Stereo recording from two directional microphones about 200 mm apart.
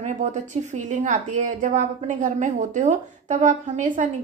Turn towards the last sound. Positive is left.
turn(degrees=-40)  # may be behind; listen again after turning